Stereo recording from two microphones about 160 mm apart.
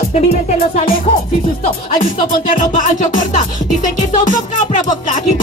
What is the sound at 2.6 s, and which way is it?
Music, 50° left (ahead or behind).